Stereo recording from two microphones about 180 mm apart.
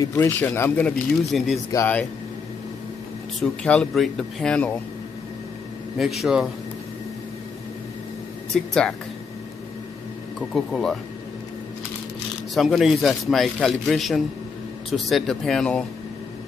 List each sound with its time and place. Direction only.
0.0 s speech: 15° left (ahead or behind); by 1.6 s centre (ahead or behind)
1.7 s speech: 10° left (ahead or behind)
3.3 s a man's voice: 5° left (ahead or behind)
5.9 s a man's voice: centre (ahead or behind)
8.5 s a man's voice: 5° left (ahead or behind)
10.5 s a man's voice: centre (ahead or behind)
12.5 s a man's voice: centre (ahead or behind)